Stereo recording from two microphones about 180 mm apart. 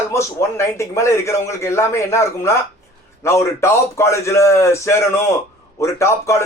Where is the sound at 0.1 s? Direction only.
15° left (ahead or behind).